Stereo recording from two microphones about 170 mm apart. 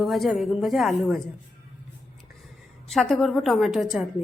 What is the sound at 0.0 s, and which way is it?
A woman's voice, centre (ahead or behind).